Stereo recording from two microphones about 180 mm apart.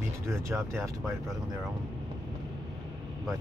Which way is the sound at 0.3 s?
15° right (ahead or behind).